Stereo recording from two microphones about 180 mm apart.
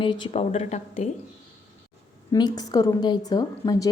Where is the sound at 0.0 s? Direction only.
25° left (ahead or behind).